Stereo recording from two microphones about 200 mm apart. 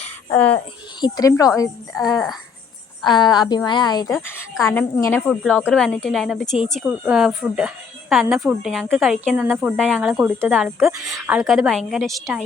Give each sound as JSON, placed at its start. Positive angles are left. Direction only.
{"t": 1.0, "sound": "a woman's voice", "side_deg": 20}
{"t": 2.1, "sound": "a woman's voice", "side_deg": 0}
{"t": 3.0, "sound": "a woman's voice", "side_deg": 20}
{"t": 9.7, "sound": "a woman's voice", "side_deg": 5}
{"t": 10.1, "sound": "speech", "side_deg": -10}
{"t": 11.3, "sound": "a woman's voice", "side_deg": 0}